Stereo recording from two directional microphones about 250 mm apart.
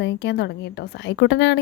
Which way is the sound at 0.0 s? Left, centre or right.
Left.